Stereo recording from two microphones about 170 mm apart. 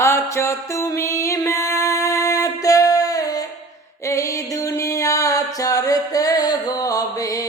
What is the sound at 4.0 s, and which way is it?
Music, 20° left (ahead or behind).